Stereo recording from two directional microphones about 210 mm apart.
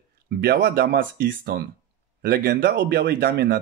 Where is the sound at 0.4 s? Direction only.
50° right (ahead or behind).